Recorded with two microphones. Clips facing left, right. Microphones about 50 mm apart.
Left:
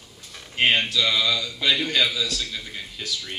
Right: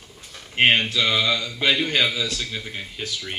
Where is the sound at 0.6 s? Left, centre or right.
Right.